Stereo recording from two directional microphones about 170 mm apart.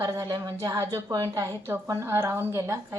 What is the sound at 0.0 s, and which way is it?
A woman's voice, 20° right (ahead or behind).